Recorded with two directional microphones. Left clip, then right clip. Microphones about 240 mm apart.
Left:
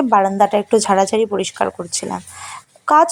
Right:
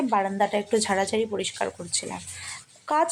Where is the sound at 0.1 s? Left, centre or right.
Left.